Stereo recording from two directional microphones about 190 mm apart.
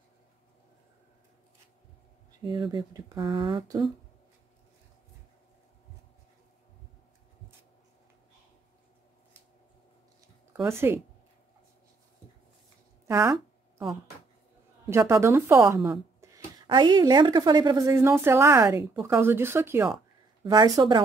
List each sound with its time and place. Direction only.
2.4 s a woman's voice: 25° right (ahead or behind)
10.5 s speech: 15° right (ahead or behind)
13.0 s a sound: 15° right (ahead or behind)
14.9 s a woman's voice: 15° right (ahead or behind)
16.2 s a sound: 15° right (ahead or behind)
16.6 s a woman's voice: 25° right (ahead or behind)